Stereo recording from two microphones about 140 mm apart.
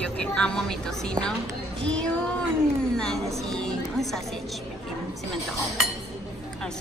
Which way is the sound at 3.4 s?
5° left (ahead or behind).